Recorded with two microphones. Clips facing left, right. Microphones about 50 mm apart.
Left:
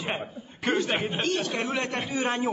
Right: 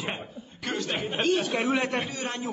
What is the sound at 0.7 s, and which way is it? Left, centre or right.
Speech, left.